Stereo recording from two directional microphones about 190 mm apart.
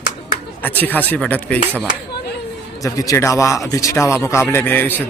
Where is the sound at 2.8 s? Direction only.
15° left (ahead or behind).